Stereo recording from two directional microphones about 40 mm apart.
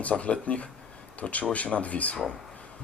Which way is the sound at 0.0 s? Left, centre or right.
Left.